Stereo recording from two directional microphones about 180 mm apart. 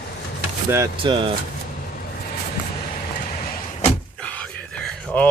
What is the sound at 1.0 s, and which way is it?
Speech, 30° right (ahead or behind).